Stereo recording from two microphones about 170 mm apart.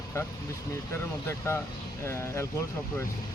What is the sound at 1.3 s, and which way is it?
Speech, 15° left (ahead or behind).